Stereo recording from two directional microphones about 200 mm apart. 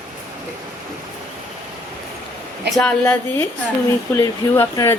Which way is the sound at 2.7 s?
5° left (ahead or behind).